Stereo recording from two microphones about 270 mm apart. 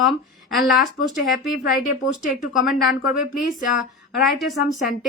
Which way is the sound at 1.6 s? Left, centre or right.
Left.